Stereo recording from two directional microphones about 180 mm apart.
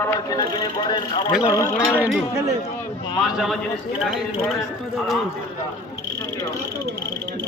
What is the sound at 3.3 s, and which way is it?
Speech, centre (ahead or behind).